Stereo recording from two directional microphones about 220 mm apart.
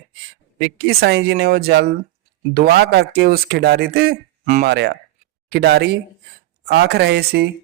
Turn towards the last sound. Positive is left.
turn(degrees=-45)  # may be behind; listen again after turning